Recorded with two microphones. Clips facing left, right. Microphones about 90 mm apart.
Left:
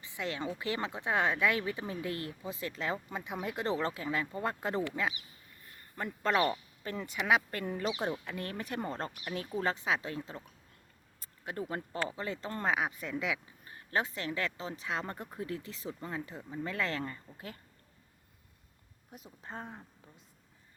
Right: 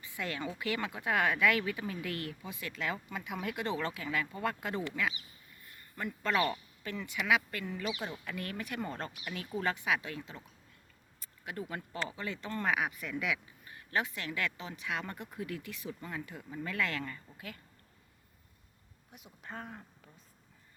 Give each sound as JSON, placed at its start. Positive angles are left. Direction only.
{"t": 0.0, "sound": "speech", "side_deg": 20}
{"t": 7.6, "sound": "speech", "side_deg": 50}
{"t": 8.1, "sound": "speech", "side_deg": 20}
{"t": 19.1, "sound": "speech", "side_deg": 35}